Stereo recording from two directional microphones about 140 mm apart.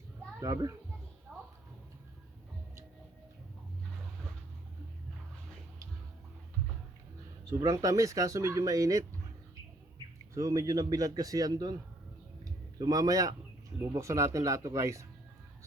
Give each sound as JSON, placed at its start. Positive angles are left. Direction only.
{"t": 0.3, "sound": "a child's voice", "side_deg": -25}
{"t": 1.3, "sound": "a sound", "side_deg": 0}
{"t": 7.6, "sound": "speech", "side_deg": -25}
{"t": 10.3, "sound": "speech", "side_deg": -25}